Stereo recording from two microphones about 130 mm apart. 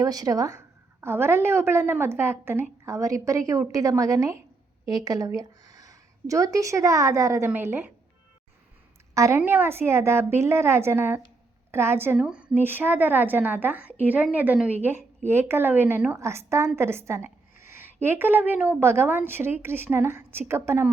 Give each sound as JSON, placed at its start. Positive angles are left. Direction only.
{"t": 0.0, "sound": "a woman's voice", "side_deg": -30}
{"t": 9.1, "sound": "a woman's voice", "side_deg": -25}